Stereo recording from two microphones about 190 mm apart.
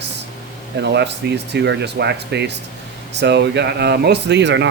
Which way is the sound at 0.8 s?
65° right (ahead or behind).